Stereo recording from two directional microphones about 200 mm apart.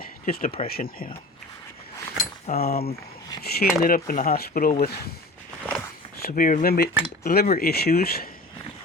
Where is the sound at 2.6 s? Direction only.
50° left (ahead or behind).